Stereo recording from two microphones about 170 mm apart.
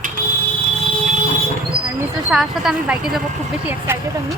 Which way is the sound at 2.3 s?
Centre (ahead or behind).